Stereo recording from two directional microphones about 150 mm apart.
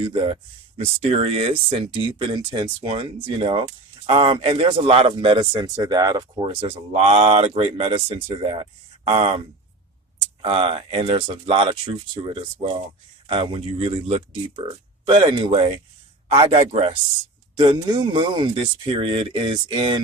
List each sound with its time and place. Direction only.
0.0 s speech: 35° right (ahead or behind)
10.4 s speech: 35° right (ahead or behind)